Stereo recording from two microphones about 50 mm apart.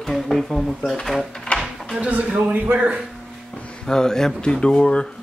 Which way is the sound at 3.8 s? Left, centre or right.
Centre.